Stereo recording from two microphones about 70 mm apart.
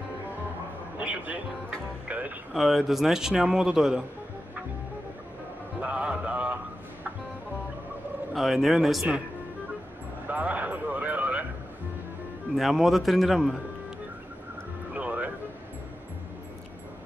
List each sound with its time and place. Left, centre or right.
0.9 s a man's voice: right
2.0 s music: right
2.5 s a man's voice: centre
5.8 s music: centre
8.3 s a man's voice: centre
10.2 s a sound: right
12.5 s a man's voice: centre
15.0 s music: right